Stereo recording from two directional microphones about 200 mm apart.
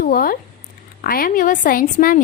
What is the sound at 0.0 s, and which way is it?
A woman's voice, 45° left (ahead or behind).